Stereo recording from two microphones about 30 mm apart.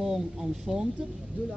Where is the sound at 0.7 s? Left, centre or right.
Centre.